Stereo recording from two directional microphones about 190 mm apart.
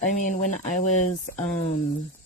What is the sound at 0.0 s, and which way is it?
Speech, 40° left (ahead or behind).